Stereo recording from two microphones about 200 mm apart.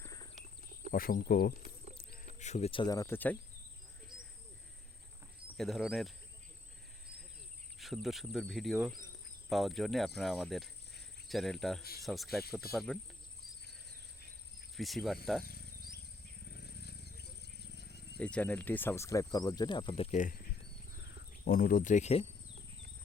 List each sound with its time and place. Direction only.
0.0 s cricket: 15° left (ahead or behind)
0.9 s speech: 45° left (ahead or behind); by 3.3 s 10° left (ahead or behind)
5.5 s cricket: centre (ahead or behind)
7.8 s cricket: centre (ahead or behind)
10.2 s speech: centre (ahead or behind)
11.8 s speech: 50° left (ahead or behind)
12.0 s cricket: centre (ahead or behind)
14.8 s cricket: centre (ahead or behind)
15.4 s insect: 50° left (ahead or behind)
16.5 s a sound: 55° left (ahead or behind)
18.2 s speech: 5° left (ahead or behind); by 22.3 s 30° left (ahead or behind)